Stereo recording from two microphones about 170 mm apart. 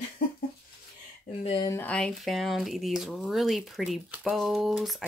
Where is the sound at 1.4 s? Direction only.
30° left (ahead or behind).